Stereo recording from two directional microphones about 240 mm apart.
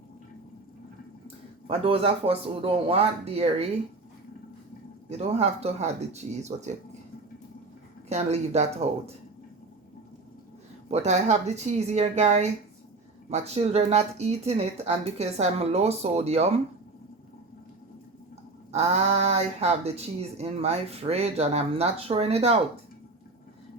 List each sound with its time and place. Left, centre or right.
1.6 s speech: right
5.0 s speech: right
8.1 s speech: right
10.8 s speech: right
18.7 s speech: right